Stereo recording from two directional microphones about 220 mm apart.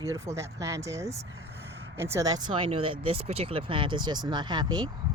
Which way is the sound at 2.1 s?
15° right (ahead or behind).